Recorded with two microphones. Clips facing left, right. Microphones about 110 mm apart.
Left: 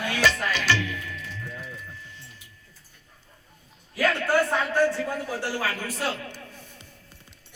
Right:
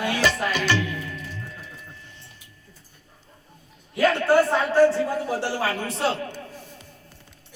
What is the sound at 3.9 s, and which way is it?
Speech, 25° right (ahead or behind).